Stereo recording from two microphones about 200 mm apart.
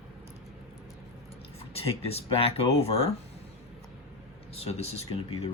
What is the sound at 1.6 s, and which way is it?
Speech, 30° left (ahead or behind).